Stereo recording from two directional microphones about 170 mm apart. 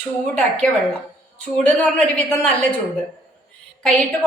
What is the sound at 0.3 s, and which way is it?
A woman's voice, 5° left (ahead or behind).